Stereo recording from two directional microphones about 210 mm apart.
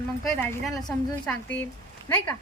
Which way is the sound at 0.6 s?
Centre (ahead or behind).